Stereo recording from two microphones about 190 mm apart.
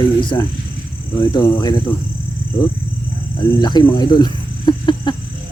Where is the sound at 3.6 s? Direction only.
20° left (ahead or behind).